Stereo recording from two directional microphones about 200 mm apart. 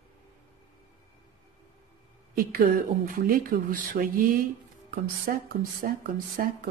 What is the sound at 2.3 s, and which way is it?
Speech, 45° right (ahead or behind).